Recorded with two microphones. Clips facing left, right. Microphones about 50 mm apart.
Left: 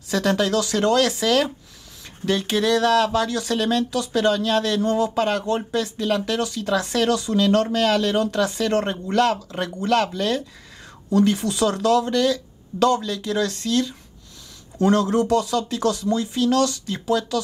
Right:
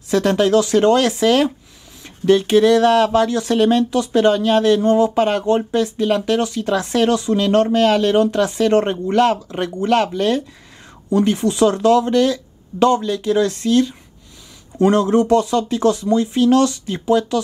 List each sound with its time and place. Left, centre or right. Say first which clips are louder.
0.1 s speech: right 6 dB; centre